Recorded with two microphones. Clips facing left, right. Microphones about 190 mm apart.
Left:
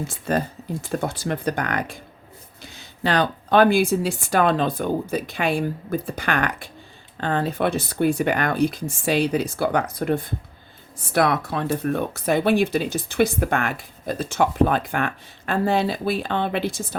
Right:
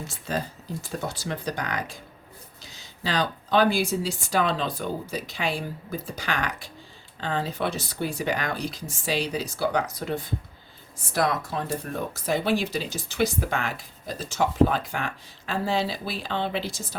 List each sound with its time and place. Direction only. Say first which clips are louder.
0.3 s speech: left 6 dB; 55° left (ahead or behind)